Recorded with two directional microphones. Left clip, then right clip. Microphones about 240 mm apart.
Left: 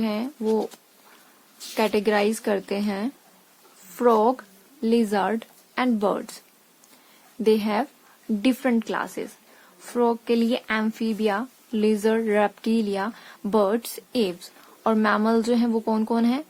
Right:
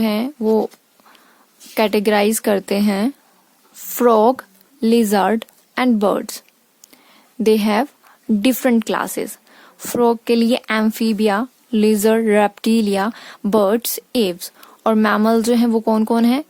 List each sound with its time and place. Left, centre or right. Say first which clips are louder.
0.0 s speech: right 7 dB; right
1.7 s speech: right 6 dB; right
7.4 s a woman's voice: right 6 dB; right